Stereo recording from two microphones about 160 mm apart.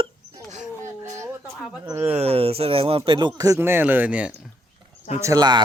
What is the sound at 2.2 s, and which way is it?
Speech, 40° right (ahead or behind).